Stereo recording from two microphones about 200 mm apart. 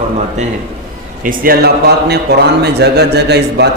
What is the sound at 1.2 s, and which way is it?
A man's voice, 45° right (ahead or behind).